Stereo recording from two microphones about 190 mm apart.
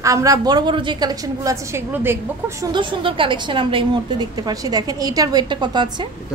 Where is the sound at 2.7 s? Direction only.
25° right (ahead or behind).